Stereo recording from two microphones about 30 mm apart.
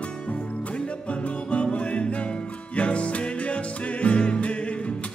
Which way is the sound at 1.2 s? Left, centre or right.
Left.